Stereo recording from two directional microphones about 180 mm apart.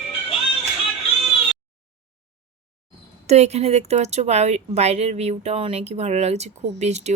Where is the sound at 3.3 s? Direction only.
35° right (ahead or behind).